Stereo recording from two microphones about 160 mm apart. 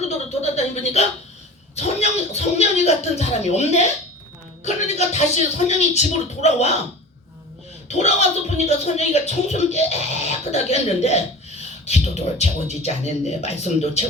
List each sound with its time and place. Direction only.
0.4 s a sound: 40° left (ahead or behind)
1.7 s speech: 45° left (ahead or behind)
7.9 s speech: 45° left (ahead or behind)